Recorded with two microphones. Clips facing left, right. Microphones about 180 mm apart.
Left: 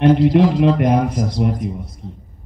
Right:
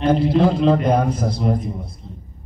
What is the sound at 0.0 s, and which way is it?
Speech, 70° left (ahead or behind).